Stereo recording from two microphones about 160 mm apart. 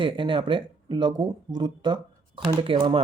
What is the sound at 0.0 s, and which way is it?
Speech, 30° right (ahead or behind).